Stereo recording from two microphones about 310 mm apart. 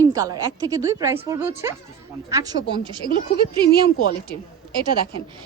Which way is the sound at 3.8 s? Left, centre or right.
Left.